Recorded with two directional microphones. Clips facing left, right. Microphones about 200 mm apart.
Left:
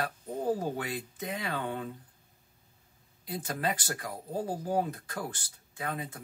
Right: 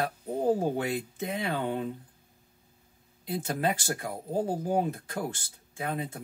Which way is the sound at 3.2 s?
25° right (ahead or behind).